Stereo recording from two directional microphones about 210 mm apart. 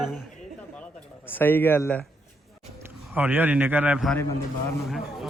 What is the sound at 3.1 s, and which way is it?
A man's voice, 10° right (ahead or behind).